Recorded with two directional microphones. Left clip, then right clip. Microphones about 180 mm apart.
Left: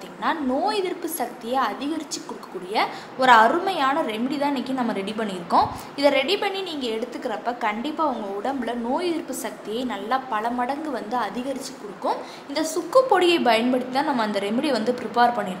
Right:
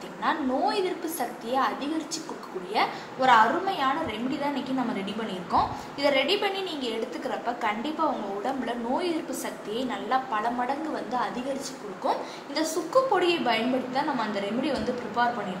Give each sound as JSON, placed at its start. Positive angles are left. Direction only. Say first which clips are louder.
{"t": 0.2, "sound": "a woman's voice", "louder": "left 2 dB", "side_deg": 60}